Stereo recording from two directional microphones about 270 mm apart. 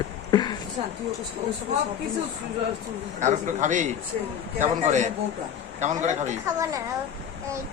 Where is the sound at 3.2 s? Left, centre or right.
Right.